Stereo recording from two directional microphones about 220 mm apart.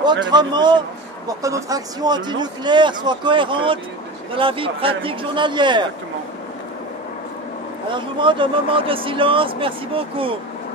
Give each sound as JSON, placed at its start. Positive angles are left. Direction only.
{"t": 0.0, "sound": "speech", "side_deg": -20}
{"t": 7.9, "sound": "speech", "side_deg": -20}